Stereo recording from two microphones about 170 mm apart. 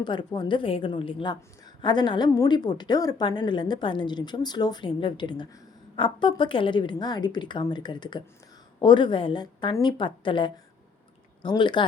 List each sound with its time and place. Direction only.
0.0 s a woman's voice: 25° left (ahead or behind)